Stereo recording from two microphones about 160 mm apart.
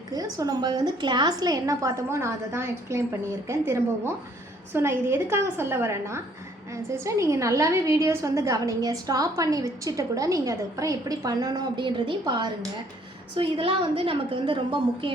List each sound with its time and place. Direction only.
0.1 s a woman's voice: 25° right (ahead or behind)